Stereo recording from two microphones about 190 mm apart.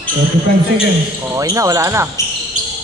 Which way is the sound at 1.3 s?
15° right (ahead or behind).